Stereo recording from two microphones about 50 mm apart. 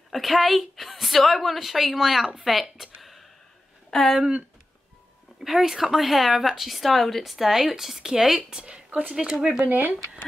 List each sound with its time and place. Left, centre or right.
0.1 s speech: centre
5.4 s speech: centre; by 9.1 s right
9.3 s speech: centre
9.7 s speech: right